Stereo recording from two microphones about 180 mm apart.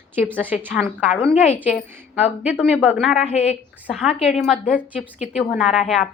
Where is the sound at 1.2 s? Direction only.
30° left (ahead or behind).